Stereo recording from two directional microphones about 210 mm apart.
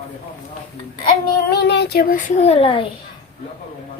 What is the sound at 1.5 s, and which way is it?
A child's voice, 55° left (ahead or behind).